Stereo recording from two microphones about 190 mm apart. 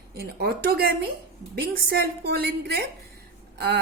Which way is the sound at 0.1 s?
55° right (ahead or behind).